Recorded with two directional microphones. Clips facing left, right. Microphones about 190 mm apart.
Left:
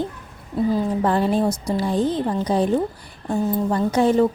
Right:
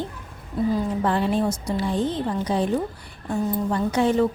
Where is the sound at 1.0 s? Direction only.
40° left (ahead or behind).